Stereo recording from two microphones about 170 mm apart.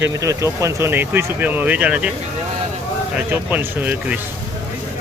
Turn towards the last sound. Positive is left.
turn(degrees=-10)  # may be behind; listen again after turning